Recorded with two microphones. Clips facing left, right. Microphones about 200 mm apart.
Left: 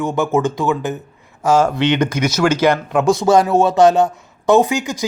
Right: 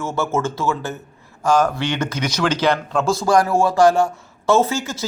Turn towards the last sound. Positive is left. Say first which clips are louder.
# left 4 dB
turn(degrees=15)  # may be behind; listen again after turning